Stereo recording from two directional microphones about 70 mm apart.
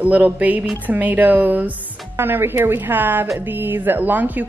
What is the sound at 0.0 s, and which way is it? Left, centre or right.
Speech, right.